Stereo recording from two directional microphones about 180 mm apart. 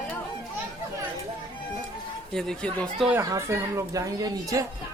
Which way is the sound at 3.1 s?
15° right (ahead or behind).